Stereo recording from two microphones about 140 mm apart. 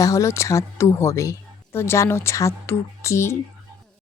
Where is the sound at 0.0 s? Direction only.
20° left (ahead or behind).